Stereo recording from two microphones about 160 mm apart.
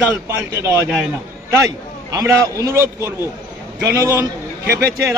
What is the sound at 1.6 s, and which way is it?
A man's voice, 20° right (ahead or behind).